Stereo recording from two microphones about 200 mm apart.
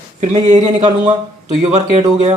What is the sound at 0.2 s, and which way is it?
Speech, 35° right (ahead or behind).